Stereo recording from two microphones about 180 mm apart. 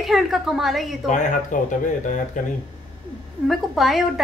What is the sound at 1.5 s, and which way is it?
Speech, 45° left (ahead or behind).